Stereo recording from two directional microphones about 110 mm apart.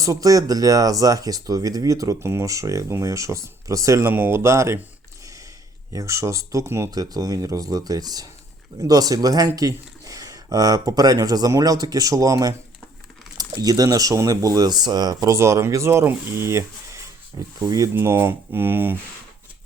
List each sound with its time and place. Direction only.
0.0 s speech: 30° right (ahead or behind)
17.9 s speech: 20° right (ahead or behind)